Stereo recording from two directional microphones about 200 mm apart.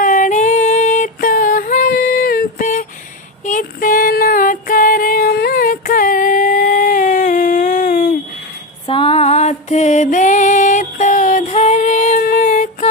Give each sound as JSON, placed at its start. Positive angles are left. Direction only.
{"t": 0.0, "sound": "female singing", "side_deg": 40}
{"t": 3.4, "sound": "music", "side_deg": 40}
{"t": 8.8, "sound": "music", "side_deg": 30}